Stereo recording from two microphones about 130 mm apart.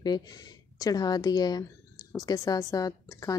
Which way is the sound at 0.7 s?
30° left (ahead or behind).